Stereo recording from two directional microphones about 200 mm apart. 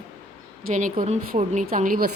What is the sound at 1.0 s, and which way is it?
A woman's voice, 40° right (ahead or behind).